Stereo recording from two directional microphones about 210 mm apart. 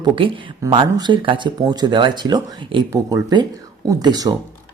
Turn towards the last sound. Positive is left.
turn(degrees=-20)  # may be behind; listen again after turning